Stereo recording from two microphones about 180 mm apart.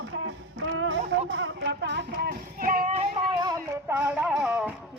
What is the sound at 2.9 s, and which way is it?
Music, 25° right (ahead or behind).